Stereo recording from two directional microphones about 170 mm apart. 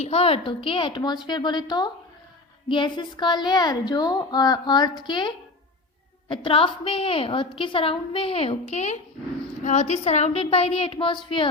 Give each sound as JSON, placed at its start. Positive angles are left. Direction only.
{"t": 0.0, "sound": "a woman's voice", "side_deg": 35}